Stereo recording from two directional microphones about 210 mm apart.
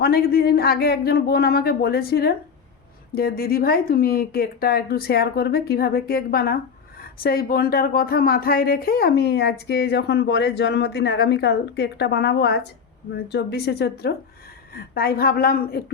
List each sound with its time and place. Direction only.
0.0 s speech: 45° left (ahead or behind)